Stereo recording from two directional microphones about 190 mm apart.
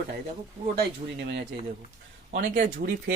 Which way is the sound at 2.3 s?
50° right (ahead or behind).